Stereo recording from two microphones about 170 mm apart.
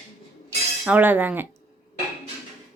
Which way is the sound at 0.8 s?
10° right (ahead or behind).